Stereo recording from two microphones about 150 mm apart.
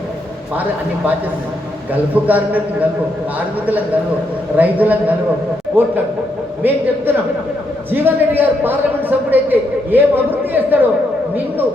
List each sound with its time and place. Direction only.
1.9 s a man's voice: 10° right (ahead or behind)
4.5 s a man's voice: 10° right (ahead or behind)